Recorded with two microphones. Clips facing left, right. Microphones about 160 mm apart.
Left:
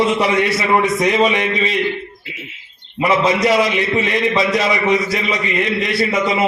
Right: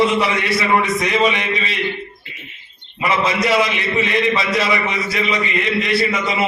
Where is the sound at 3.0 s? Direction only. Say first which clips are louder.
Left 4 dB; 45° left (ahead or behind).